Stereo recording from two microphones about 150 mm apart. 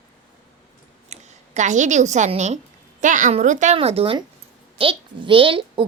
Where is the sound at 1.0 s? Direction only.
50° right (ahead or behind).